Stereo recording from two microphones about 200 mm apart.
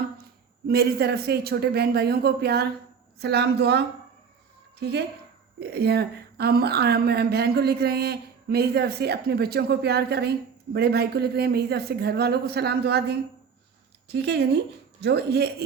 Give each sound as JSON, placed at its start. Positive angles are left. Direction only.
{"t": 0.7, "sound": "a woman's voice", "side_deg": -50}